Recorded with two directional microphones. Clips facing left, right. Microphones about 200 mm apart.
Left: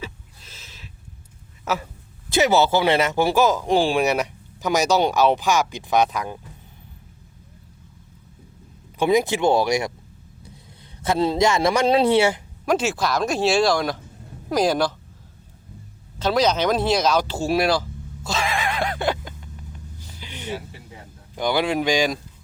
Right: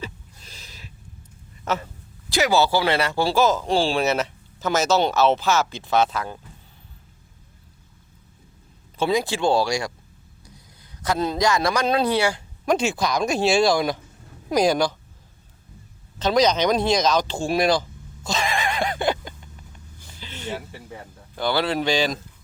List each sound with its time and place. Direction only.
0.0 s a sound: centre (ahead or behind)
1.6 s speech: 5° left (ahead or behind)
2.3 s speech: 20° left (ahead or behind)
9.0 s a man's voice: 20° left (ahead or behind)
11.0 s a man's voice: 25° left (ahead or behind)
12.6 s speech: 5° left (ahead or behind)
16.1 s speech: 5° left (ahead or behind)
20.1 s a sound: 15° left (ahead or behind)
21.3 s speech: 15° left (ahead or behind)